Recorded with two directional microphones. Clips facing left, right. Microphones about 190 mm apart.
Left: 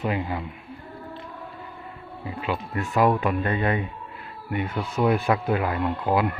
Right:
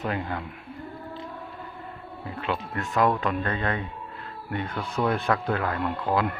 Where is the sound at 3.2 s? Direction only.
15° left (ahead or behind).